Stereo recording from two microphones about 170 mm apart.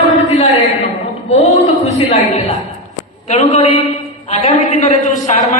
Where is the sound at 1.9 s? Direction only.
40° left (ahead or behind).